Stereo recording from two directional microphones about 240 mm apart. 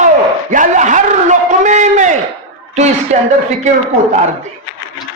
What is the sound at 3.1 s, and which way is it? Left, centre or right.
Speech, right.